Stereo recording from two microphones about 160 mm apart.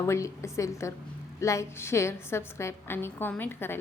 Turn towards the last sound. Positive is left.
turn(degrees=15)  # may be behind; listen again after turning